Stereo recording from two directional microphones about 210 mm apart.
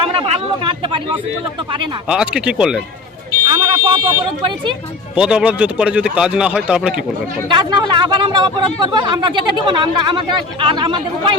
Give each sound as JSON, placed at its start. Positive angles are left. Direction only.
{"t": 0.0, "sound": "speech", "side_deg": -25}
{"t": 2.0, "sound": "a man's voice", "side_deg": -5}
{"t": 3.5, "sound": "a sound", "side_deg": -20}
{"t": 5.1, "sound": "a man's voice", "side_deg": -5}
{"t": 7.5, "sound": "speech", "side_deg": -20}